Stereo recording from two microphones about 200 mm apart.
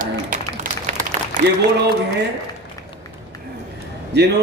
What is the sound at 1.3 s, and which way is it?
Applause, 40° right (ahead or behind).